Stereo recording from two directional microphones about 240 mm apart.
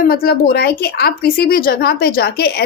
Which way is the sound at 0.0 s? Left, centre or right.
Left.